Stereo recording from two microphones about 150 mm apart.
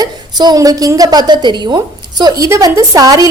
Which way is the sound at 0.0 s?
25° right (ahead or behind).